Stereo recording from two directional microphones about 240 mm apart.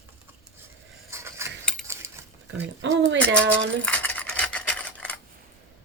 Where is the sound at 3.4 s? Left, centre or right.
Right.